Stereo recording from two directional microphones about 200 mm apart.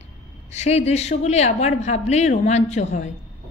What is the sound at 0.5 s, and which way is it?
Speech, 35° left (ahead or behind).